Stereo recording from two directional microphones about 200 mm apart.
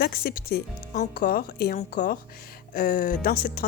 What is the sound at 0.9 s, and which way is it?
Speech, 40° left (ahead or behind).